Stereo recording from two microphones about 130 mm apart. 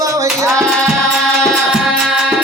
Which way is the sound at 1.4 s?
Centre (ahead or behind).